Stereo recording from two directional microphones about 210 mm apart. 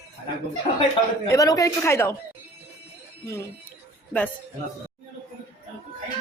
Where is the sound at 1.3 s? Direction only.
15° left (ahead or behind).